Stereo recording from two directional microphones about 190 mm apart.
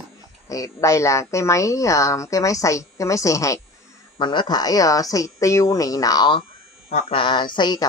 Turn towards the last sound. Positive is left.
turn(degrees=20)  # may be behind; listen again after turning